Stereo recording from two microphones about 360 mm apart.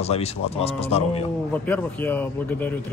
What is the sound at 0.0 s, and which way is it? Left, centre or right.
A man's voice, centre.